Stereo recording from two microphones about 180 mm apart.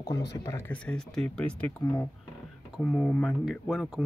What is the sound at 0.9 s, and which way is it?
Speech, 5° left (ahead or behind).